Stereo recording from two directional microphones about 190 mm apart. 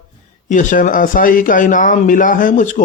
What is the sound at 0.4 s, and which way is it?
A man's voice, 40° left (ahead or behind).